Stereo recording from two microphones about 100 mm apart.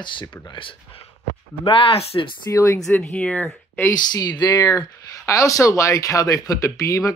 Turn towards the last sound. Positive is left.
turn(degrees=30)  # may be behind; listen again after turning